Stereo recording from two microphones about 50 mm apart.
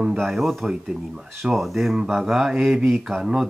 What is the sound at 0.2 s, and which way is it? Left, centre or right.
Speech, centre.